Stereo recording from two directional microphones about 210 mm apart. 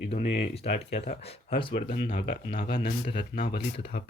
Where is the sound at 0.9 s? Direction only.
30° left (ahead or behind).